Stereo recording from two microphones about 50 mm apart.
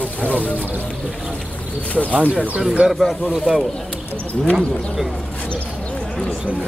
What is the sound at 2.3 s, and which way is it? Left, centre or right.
Speech, right.